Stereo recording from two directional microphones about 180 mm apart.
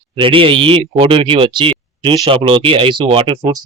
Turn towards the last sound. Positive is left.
turn(degrees=-30)  # may be behind; listen again after turning